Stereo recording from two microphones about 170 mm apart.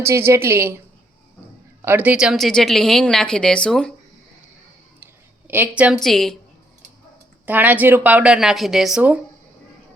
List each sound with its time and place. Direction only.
0.0 s speech: 15° right (ahead or behind)
1.8 s a woman's voice: 10° right (ahead or behind)
5.5 s a woman's voice: 10° right (ahead or behind)
7.4 s speech: 10° right (ahead or behind)